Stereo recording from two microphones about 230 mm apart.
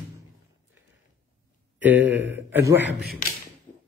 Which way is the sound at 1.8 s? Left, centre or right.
Centre.